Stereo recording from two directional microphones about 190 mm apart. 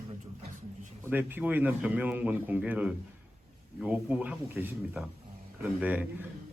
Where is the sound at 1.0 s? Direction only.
10° right (ahead or behind).